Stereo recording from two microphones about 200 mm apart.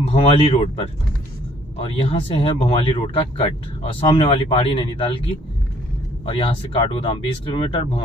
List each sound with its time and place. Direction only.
0.1 s speech: 25° left (ahead or behind)
1.9 s speech: 30° left (ahead or behind)
6.2 s speech: 25° left (ahead or behind)